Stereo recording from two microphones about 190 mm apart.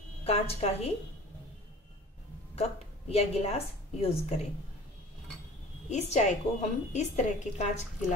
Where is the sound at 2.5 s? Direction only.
35° left (ahead or behind).